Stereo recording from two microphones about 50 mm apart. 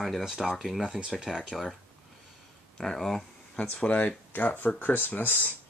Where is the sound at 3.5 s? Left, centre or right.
Left.